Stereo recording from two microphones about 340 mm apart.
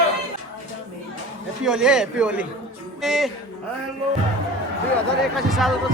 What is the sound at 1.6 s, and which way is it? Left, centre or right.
A man's voice, centre.